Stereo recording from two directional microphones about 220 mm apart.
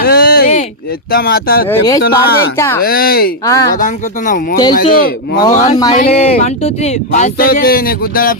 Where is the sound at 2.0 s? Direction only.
45° left (ahead or behind).